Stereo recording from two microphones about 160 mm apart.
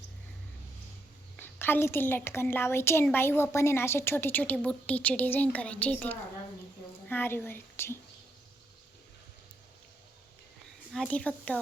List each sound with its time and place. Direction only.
1.4 s a woman's voice: 15° left (ahead or behind)
10.9 s a woman's voice: 5° left (ahead or behind)